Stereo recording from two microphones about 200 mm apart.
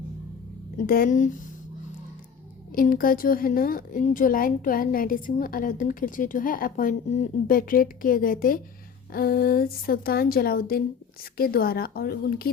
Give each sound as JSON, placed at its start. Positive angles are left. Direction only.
{"t": 0.9, "sound": "a woman's voice", "side_deg": 45}
{"t": 2.7, "sound": "a woman's voice", "side_deg": 45}